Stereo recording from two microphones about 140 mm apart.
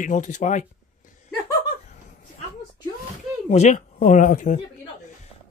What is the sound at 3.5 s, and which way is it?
Speech, 55° left (ahead or behind).